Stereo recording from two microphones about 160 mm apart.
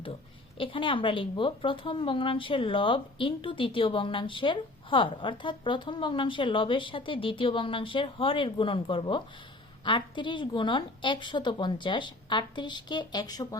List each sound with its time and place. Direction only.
0.5 s a woman's voice: 30° left (ahead or behind)